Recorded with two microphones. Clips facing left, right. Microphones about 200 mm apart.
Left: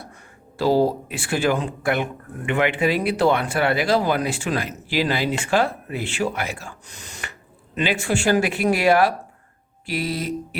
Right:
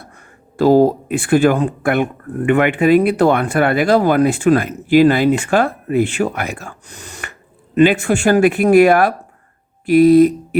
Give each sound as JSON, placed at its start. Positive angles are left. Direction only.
{"t": 0.0, "sound": "speech", "side_deg": -55}